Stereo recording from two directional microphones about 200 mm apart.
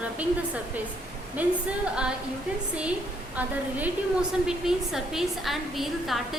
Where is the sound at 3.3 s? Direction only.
10° right (ahead or behind).